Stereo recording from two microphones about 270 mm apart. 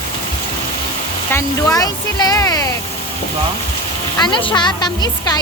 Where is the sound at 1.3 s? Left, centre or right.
Centre.